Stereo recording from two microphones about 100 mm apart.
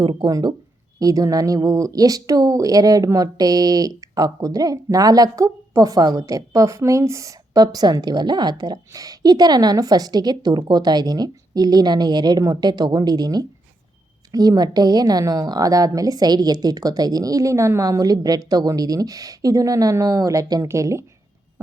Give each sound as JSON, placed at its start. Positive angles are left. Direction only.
{"t": 0.0, "sound": "speech", "side_deg": -50}
{"t": 0.3, "sound": "speech", "side_deg": -35}